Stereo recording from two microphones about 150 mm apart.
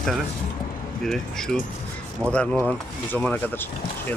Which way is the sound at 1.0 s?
5° left (ahead or behind).